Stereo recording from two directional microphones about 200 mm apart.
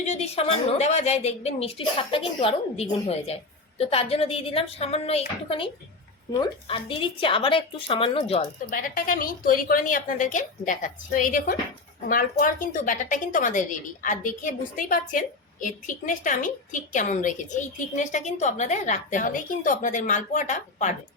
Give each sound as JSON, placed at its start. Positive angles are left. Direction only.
{"t": 0.0, "sound": "a woman's voice", "side_deg": 35}
{"t": 8.4, "sound": "a woman's voice", "side_deg": 45}